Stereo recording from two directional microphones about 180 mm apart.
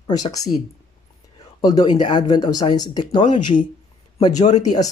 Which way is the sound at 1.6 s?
20° left (ahead or behind).